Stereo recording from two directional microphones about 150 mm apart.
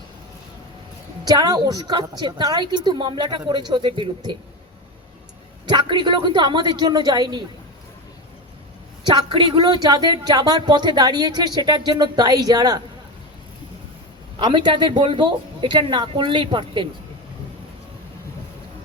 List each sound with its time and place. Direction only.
1.3 s a woman's voice: 25° right (ahead or behind)
5.6 s a woman's voice: 30° right (ahead or behind)
9.0 s a woman's voice: 35° right (ahead or behind)
14.3 s speech: 30° right (ahead or behind)